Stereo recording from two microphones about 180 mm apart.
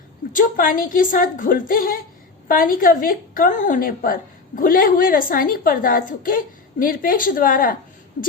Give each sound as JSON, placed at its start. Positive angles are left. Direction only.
{"t": 0.3, "sound": "speech", "side_deg": 50}